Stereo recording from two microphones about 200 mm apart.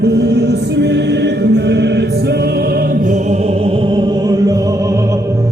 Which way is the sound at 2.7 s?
35° right (ahead or behind).